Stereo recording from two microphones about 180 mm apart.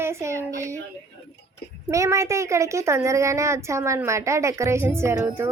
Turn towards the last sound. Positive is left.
turn(degrees=-15)  # may be behind; listen again after turning